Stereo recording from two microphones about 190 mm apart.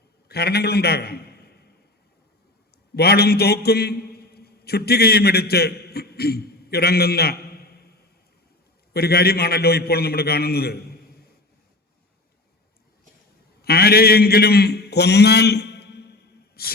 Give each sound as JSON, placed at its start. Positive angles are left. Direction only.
{"t": 0.3, "sound": "a man's voice", "side_deg": 55}
{"t": 2.9, "sound": "a man's voice", "side_deg": 55}
{"t": 8.9, "sound": "a man's voice", "side_deg": 55}
{"t": 13.6, "sound": "a man's voice", "side_deg": 55}
{"t": 16.6, "sound": "hiss", "side_deg": 55}